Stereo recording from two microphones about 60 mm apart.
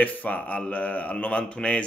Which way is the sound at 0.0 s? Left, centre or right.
Left.